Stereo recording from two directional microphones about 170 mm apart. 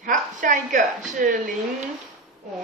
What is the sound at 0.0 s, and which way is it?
Speech, 50° right (ahead or behind).